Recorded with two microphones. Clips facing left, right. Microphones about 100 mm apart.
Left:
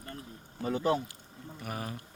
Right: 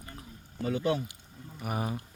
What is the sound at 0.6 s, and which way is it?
Speech, 35° left (ahead or behind).